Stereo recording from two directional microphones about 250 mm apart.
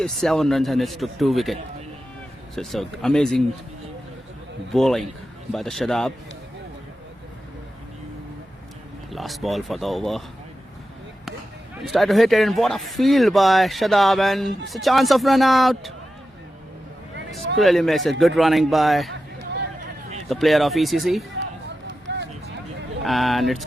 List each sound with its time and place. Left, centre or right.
0.0 s speech: centre
2.6 s speech: centre
4.7 s speech: centre
9.0 s speech: centre
11.8 s speech: centre
17.6 s speech: centre
20.2 s speech: centre
22.1 s a sound: right
23.0 s speech: centre